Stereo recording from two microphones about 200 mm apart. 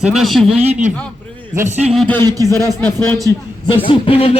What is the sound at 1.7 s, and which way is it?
Speech, 30° right (ahead or behind).